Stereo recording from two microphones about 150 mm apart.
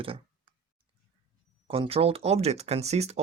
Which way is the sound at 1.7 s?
40° right (ahead or behind).